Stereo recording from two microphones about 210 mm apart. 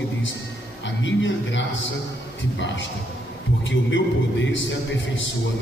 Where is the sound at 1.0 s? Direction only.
60° left (ahead or behind).